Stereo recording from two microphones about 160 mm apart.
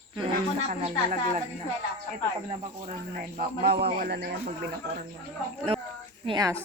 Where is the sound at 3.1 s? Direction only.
65° right (ahead or behind); by 4.4 s 90° right.